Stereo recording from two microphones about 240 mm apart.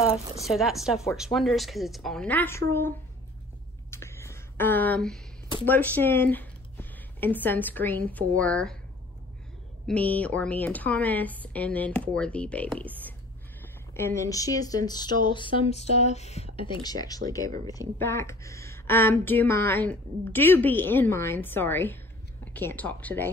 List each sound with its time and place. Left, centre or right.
0.5 s a woman's voice: centre
3.9 s a sound: centre
5.7 s speech: centre
9.8 s a woman's voice: centre